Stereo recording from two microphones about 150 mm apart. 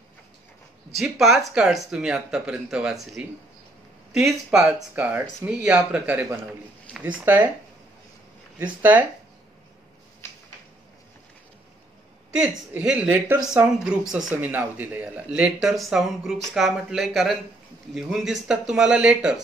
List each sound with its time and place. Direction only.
0.9 s a man's voice: centre (ahead or behind)
8.5 s a man's voice: 10° right (ahead or behind)
10.2 s a sound: 15° left (ahead or behind)
12.4 s a man's voice: 5° right (ahead or behind)